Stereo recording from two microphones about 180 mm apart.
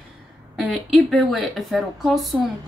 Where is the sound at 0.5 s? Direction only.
Centre (ahead or behind).